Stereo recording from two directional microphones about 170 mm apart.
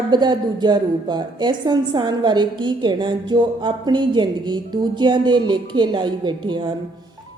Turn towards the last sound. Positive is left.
turn(degrees=-25)  # may be behind; listen again after turning